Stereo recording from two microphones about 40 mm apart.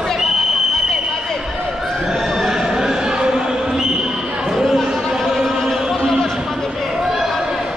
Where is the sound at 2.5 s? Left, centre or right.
Centre.